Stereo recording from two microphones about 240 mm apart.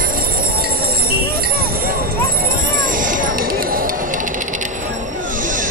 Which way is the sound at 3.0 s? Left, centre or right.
Right.